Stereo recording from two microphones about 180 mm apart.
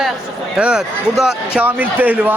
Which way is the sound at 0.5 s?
5° right (ahead or behind).